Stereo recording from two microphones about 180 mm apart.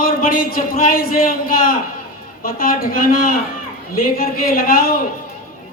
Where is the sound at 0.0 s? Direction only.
50° left (ahead or behind).